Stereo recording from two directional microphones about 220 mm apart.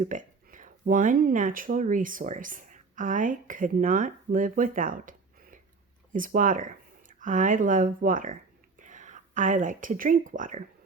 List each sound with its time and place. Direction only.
0.0 s speech: 35° right (ahead or behind)